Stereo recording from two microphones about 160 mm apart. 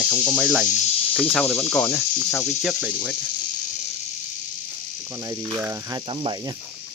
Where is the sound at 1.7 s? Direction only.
20° left (ahead or behind).